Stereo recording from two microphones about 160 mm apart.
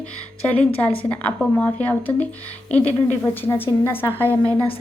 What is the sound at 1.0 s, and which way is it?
A woman's voice, 10° left (ahead or behind).